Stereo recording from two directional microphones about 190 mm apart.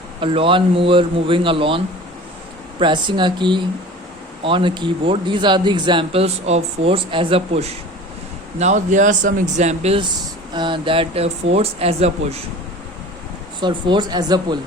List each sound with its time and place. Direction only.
0.2 s speech: 30° right (ahead or behind)
13.6 s speech: 25° right (ahead or behind)